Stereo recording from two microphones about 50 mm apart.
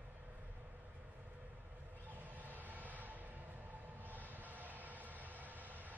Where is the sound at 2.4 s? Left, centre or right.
Right.